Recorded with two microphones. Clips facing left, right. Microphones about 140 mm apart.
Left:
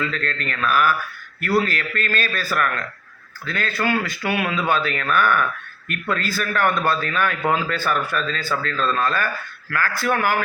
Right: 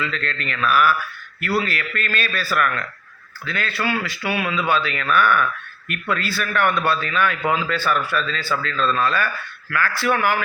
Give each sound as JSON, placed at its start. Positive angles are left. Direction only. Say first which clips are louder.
{"t": 0.0, "sound": "speech", "louder": "left 1 dB", "side_deg": 45}